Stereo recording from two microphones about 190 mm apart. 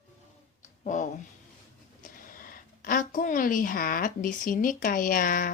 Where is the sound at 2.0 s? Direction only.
45° left (ahead or behind).